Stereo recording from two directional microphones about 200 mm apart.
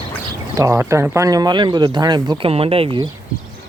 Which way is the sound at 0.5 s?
15° right (ahead or behind).